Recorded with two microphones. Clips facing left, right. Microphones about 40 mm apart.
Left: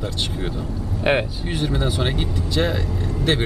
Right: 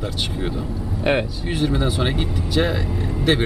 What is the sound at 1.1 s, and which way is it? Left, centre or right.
Speech, centre.